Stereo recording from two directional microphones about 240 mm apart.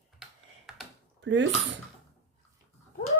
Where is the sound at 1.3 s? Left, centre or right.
Right.